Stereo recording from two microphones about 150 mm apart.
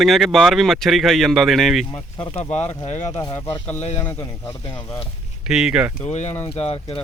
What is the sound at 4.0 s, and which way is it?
Speech, 15° left (ahead or behind).